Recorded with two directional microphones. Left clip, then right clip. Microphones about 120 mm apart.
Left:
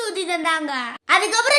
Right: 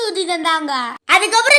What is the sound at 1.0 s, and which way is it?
Speech, 30° right (ahead or behind).